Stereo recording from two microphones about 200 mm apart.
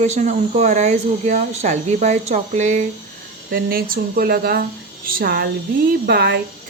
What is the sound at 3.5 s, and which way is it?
A woman's voice, 45° right (ahead or behind).